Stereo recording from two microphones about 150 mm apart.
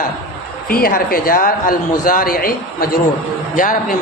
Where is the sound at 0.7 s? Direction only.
75° left (ahead or behind).